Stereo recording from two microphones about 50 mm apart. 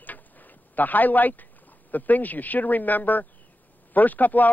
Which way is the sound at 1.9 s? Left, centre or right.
Left.